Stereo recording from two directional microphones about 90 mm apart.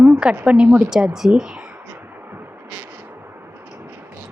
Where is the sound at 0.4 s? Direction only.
10° right (ahead or behind).